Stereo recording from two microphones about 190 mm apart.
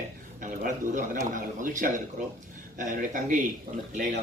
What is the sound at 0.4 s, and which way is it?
Speech, 45° right (ahead or behind).